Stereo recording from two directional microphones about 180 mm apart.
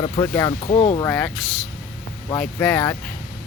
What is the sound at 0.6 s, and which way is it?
Speech, 35° left (ahead or behind).